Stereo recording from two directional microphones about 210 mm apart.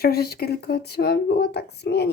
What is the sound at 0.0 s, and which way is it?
Speech, 50° left (ahead or behind).